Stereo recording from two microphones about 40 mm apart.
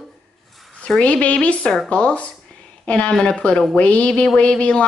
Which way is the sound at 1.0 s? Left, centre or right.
Left.